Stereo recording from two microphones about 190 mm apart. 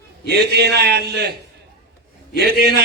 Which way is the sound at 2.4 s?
55° right (ahead or behind).